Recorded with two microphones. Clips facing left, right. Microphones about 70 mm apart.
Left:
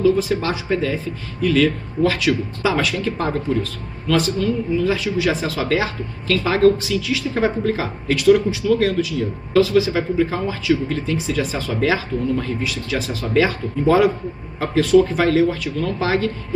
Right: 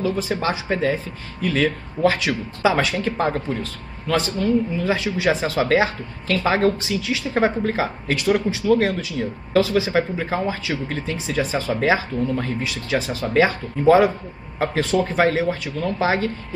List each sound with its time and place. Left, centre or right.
0.0 s speech: right